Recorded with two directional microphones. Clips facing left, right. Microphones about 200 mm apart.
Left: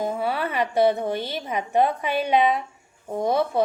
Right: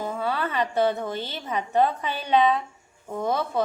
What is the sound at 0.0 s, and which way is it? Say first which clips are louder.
A woman's voice: left 2 dB; 15° left (ahead or behind).